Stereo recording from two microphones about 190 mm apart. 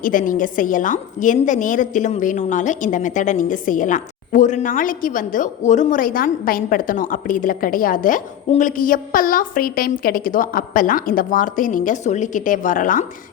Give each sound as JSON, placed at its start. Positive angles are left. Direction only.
{"t": 0.0, "sound": "a woman's voice", "side_deg": 45}